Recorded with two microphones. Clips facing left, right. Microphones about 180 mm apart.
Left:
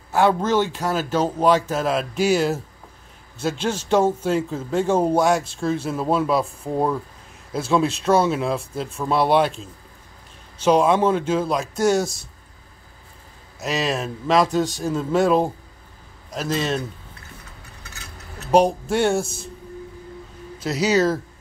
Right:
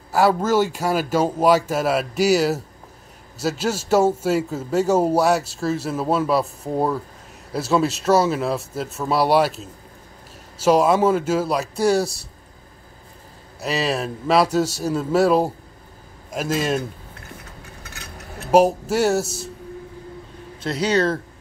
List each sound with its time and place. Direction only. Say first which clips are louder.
0.1 s speech: right 1 dB; 5° right (ahead or behind)
11.7 s speech: even; 35° right (ahead or behind)
13.6 s a man's voice: right 1 dB; centre (ahead or behind)
18.5 s speech: right 1 dB; 5° right (ahead or behind)
20.8 s speech: left 1 dB; 5° left (ahead or behind)